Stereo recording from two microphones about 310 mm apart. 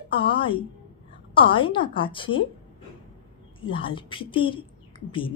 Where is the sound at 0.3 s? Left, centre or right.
Centre.